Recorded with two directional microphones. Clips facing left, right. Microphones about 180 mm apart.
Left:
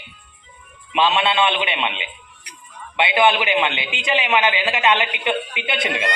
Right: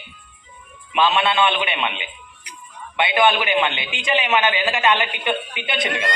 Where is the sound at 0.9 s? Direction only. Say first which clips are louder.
Even; 20° left (ahead or behind).